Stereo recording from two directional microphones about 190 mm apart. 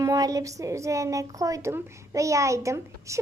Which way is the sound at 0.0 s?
20° right (ahead or behind).